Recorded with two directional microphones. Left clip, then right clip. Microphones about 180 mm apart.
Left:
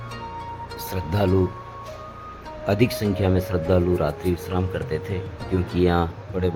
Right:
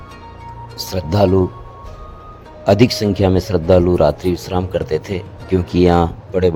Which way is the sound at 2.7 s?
35° right (ahead or behind).